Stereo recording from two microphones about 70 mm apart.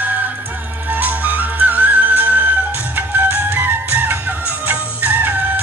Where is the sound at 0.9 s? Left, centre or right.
Right.